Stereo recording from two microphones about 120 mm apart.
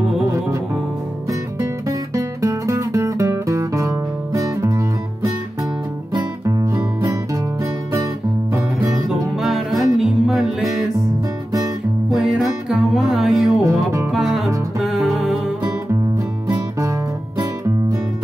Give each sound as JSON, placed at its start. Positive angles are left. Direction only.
{"t": 1.3, "sound": "music", "side_deg": -30}
{"t": 9.3, "sound": "music", "side_deg": 0}
{"t": 12.1, "sound": "music", "side_deg": 0}
{"t": 15.9, "sound": "music", "side_deg": -30}